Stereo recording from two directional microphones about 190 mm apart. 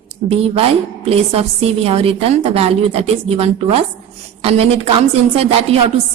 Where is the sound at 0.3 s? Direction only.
30° right (ahead or behind).